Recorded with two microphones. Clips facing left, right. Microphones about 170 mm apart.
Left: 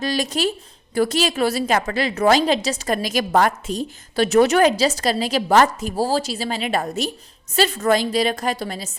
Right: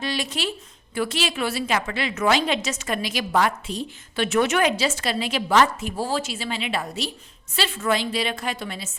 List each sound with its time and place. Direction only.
0.0 s a woman's voice: 40° left (ahead or behind)